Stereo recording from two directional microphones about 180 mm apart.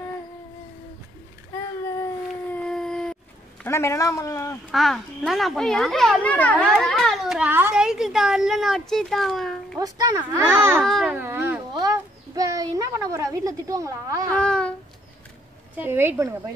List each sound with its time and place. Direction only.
2.5 s howl: 5° left (ahead or behind)
3.6 s speech: 15° left (ahead or behind)
4.6 s a child's voice: centre (ahead or behind)
9.8 s a child's voice: 20° right (ahead or behind)
10.8 s a child's voice: centre (ahead or behind)
11.1 s speech: 15° right (ahead or behind)
14.3 s a child's voice: 5° left (ahead or behind)
15.7 s a child's voice: 10° right (ahead or behind)